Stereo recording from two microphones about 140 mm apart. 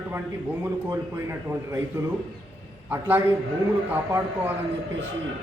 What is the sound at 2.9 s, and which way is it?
Speech, 15° right (ahead or behind).